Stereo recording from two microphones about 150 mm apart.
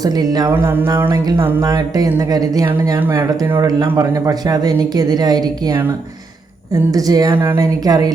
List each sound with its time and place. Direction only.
0.0 s speech: 25° right (ahead or behind)
0.5 s jingle bell: 15° right (ahead or behind)
1.6 s speech: 25° right (ahead or behind)
6.9 s speech: 25° right (ahead or behind)